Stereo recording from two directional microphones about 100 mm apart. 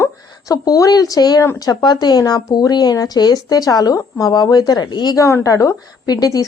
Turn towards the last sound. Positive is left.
turn(degrees=40)  # may be behind; listen again after turning